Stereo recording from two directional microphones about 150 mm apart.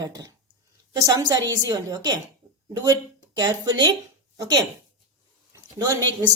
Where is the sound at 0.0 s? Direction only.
25° right (ahead or behind).